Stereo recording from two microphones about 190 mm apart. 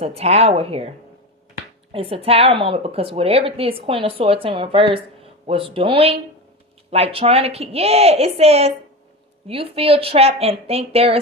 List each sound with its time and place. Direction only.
0.0 s a woman's voice: 35° right (ahead or behind)